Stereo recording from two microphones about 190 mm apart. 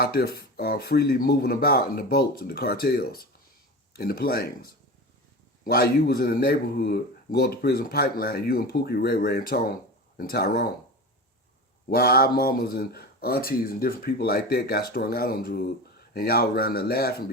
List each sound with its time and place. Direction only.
0.0 s speech: 55° left (ahead or behind)
11.9 s speech: 55° left (ahead or behind)